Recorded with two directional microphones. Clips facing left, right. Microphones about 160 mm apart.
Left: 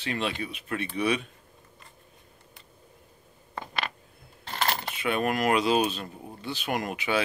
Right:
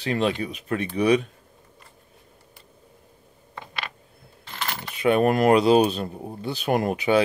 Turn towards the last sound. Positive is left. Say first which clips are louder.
# right 8 dB
turn(degrees=-35)  # may be behind; listen again after turning